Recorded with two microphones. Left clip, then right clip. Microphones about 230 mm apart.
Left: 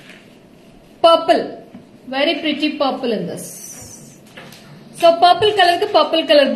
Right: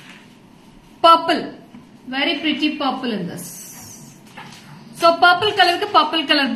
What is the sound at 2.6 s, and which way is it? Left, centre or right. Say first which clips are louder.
Speech: left 2 dB; right.